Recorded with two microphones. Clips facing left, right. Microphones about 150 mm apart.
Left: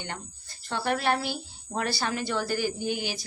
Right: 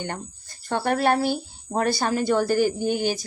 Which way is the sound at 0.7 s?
45° right (ahead or behind).